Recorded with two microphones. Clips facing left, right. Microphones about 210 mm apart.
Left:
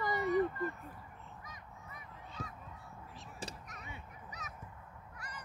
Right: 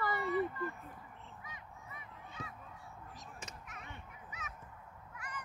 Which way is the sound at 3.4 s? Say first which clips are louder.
Left 4 dB; 35° left (ahead or behind).